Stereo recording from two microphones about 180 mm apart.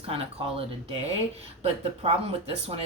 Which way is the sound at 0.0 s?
30° right (ahead or behind).